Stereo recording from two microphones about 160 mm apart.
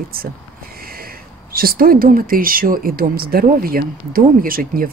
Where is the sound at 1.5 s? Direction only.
65° right (ahead or behind).